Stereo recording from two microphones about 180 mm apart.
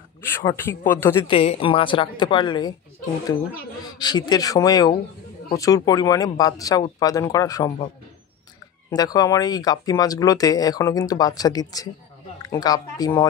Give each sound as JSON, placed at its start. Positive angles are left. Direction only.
{"t": 0.2, "sound": "speech", "side_deg": 15}
{"t": 1.2, "sound": "speech", "side_deg": 30}
{"t": 4.0, "sound": "speech", "side_deg": 25}
{"t": 8.9, "sound": "speech", "side_deg": 20}